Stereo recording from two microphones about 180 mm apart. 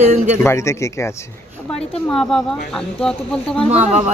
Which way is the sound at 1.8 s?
5° left (ahead or behind).